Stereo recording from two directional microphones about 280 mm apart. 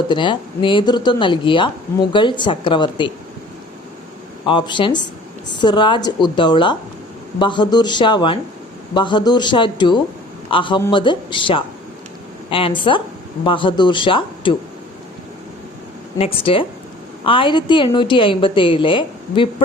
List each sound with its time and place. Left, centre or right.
0.1 s a woman's voice: centre
4.4 s a woman's voice: centre
16.1 s a woman's voice: centre